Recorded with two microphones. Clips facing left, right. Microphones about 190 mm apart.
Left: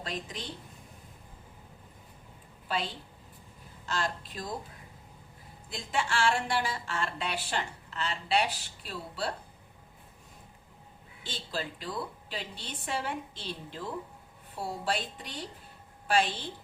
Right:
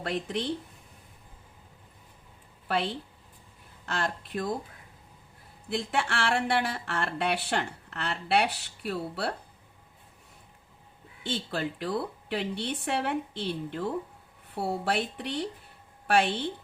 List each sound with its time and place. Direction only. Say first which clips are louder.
0.0 s speech: right 8 dB; 65° right (ahead or behind)
2.6 s speech: right 5 dB; 65° right (ahead or behind)
5.6 s speech: right 4 dB; 65° right (ahead or behind)
11.2 s speech: right 6 dB; 60° right (ahead or behind)